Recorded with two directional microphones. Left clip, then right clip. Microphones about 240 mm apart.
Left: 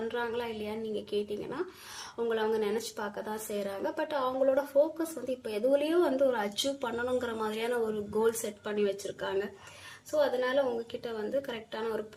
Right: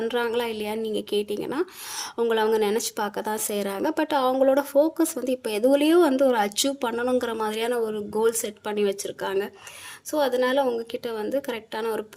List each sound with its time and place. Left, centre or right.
0.0 s speech: right